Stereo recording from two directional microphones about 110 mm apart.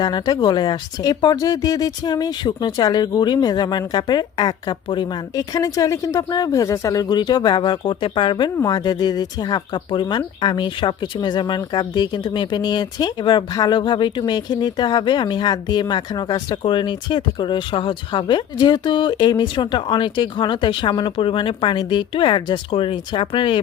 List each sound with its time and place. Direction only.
0.0 s speech: 40° left (ahead or behind)